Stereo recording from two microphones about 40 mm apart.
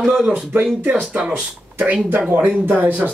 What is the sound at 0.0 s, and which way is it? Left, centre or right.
Speech, centre.